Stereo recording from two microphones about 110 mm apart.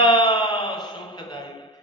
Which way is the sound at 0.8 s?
45° left (ahead or behind).